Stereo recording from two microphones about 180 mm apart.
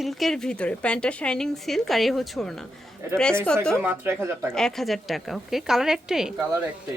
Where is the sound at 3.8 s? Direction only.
10° right (ahead or behind).